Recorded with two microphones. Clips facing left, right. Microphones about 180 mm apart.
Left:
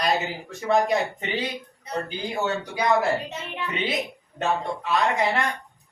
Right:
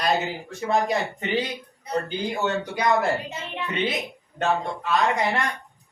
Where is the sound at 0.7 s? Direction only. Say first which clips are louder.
Left 2 dB; centre (ahead or behind).